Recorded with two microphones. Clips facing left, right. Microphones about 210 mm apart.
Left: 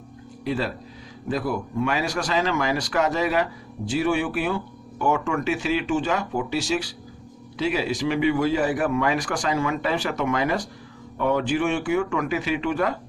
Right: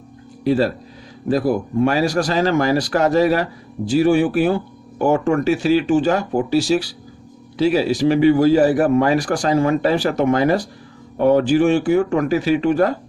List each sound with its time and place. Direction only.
0.4 s speech: 40° right (ahead or behind)